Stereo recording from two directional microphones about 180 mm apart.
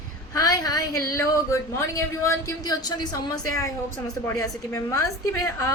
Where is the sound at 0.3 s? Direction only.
20° left (ahead or behind).